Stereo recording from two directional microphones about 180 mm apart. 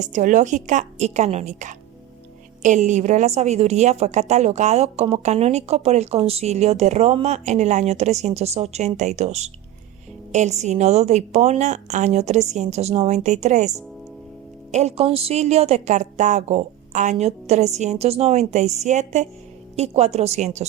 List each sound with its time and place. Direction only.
0.0 s a woman's voice: 45° right (ahead or behind)